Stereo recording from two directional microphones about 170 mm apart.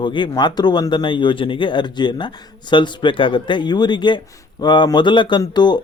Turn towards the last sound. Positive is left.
turn(degrees=25)  # may be behind; listen again after turning